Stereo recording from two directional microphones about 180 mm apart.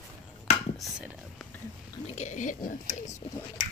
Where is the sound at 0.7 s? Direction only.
Centre (ahead or behind).